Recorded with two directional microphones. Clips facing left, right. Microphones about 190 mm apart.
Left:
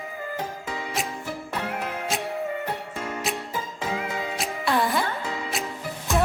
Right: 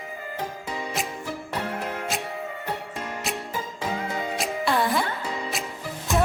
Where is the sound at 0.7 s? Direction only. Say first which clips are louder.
Right 1 dB; 20° right (ahead or behind).